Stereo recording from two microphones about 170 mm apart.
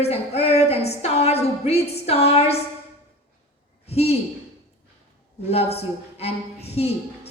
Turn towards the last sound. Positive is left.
turn(degrees=35)  # may be behind; listen again after turning